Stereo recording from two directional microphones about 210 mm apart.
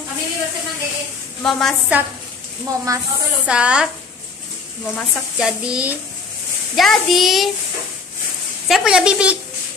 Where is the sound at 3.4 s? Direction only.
5° right (ahead or behind).